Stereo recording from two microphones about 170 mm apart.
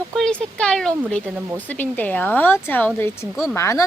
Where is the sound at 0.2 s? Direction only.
5° left (ahead or behind).